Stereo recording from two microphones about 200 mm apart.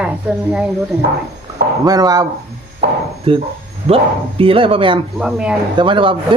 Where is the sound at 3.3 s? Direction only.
25° right (ahead or behind).